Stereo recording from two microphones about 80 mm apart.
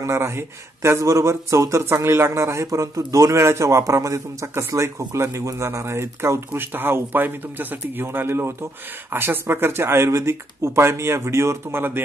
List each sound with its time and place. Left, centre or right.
0.0 s a man's voice: right